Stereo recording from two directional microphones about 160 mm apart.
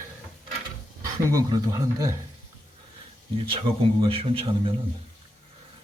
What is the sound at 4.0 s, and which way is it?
Speech, 35° right (ahead or behind).